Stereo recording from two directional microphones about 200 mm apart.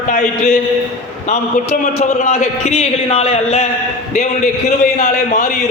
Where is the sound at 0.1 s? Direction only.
40° left (ahead or behind).